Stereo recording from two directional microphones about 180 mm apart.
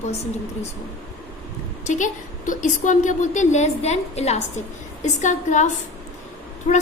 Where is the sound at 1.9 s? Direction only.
45° left (ahead or behind).